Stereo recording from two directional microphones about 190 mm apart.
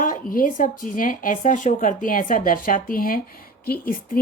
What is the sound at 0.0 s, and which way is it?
A woman's voice, 45° left (ahead or behind).